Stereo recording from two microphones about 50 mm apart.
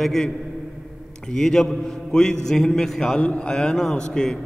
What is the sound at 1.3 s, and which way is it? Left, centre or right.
A man's voice, centre.